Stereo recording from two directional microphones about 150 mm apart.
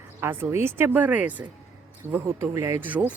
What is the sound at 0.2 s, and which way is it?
Speech, 15° right (ahead or behind).